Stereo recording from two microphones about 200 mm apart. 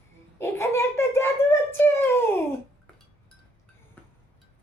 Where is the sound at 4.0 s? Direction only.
5° left (ahead or behind).